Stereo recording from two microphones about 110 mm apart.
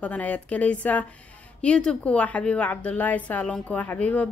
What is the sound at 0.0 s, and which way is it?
A woman's voice, 10° left (ahead or behind).